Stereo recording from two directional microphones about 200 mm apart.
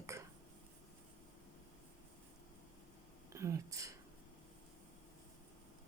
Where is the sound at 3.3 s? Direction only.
15° right (ahead or behind).